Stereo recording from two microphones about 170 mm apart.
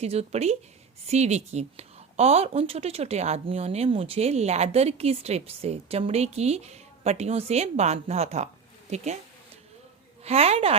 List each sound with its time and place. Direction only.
0.0 s a woman's voice: 40° right (ahead or behind)
10.2 s a woman's voice: 35° right (ahead or behind)